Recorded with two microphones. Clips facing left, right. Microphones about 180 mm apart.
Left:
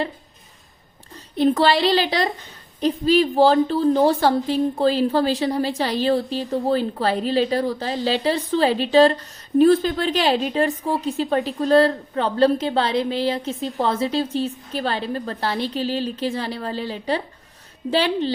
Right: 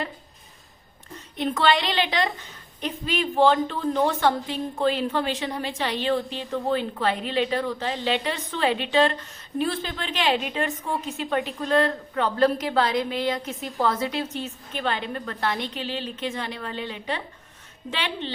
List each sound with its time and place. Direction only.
1.1 s a woman's voice: 35° left (ahead or behind)